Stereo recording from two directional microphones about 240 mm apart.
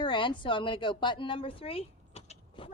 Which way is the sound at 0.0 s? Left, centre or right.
Centre.